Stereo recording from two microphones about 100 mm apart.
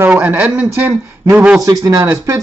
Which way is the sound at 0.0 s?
20° right (ahead or behind).